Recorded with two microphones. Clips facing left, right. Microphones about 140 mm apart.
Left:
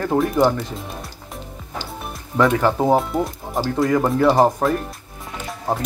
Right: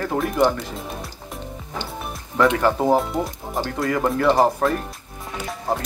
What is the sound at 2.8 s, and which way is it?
Speech, centre (ahead or behind).